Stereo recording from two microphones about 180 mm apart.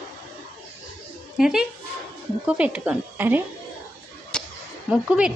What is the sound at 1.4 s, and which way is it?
Speech, 5° right (ahead or behind).